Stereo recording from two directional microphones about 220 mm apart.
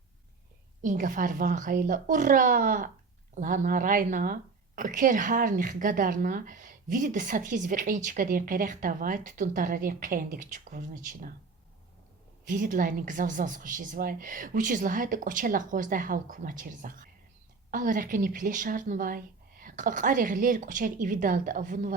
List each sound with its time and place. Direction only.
0.8 s a woman's voice: 35° right (ahead or behind)
12.5 s a woman's voice: 35° right (ahead or behind)